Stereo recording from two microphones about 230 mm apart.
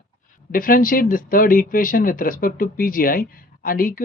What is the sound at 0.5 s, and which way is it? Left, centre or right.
Speech, left.